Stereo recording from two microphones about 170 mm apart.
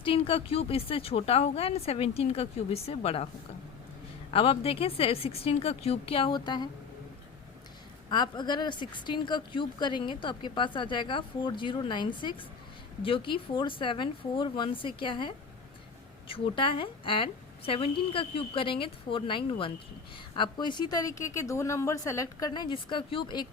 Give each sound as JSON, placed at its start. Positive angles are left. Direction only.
{"t": 0.0, "sound": "speech", "side_deg": 35}
{"t": 4.3, "sound": "speech", "side_deg": 35}
{"t": 8.1, "sound": "speech", "side_deg": 25}
{"t": 16.3, "sound": "speech", "side_deg": 30}